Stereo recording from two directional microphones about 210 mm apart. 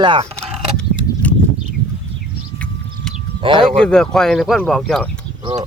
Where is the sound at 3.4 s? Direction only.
25° right (ahead or behind).